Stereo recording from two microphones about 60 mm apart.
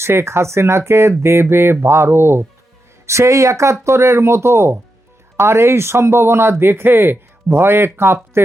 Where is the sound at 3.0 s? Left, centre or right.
Right.